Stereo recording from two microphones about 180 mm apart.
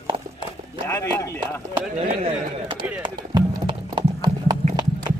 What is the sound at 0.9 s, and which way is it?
Speech, 15° left (ahead or behind).